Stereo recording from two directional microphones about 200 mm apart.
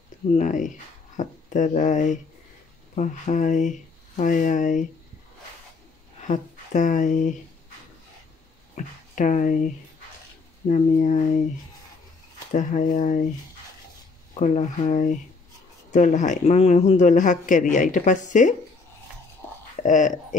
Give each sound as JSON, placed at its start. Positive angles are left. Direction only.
{"t": 0.3, "sound": "speech", "side_deg": 40}
{"t": 6.2, "sound": "speech", "side_deg": 40}
{"t": 8.7, "sound": "speech", "side_deg": 40}
{"t": 10.7, "sound": "speech", "side_deg": 40}
{"t": 12.5, "sound": "speech", "side_deg": 40}
{"t": 14.4, "sound": "speech", "side_deg": 35}
{"t": 19.8, "sound": "speech", "side_deg": 40}